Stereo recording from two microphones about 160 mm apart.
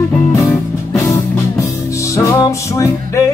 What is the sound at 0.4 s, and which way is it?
Music, 20° left (ahead or behind).